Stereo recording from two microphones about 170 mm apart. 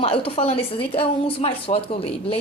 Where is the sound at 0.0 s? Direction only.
35° left (ahead or behind).